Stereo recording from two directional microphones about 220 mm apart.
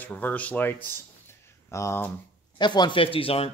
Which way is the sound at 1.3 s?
10° left (ahead or behind).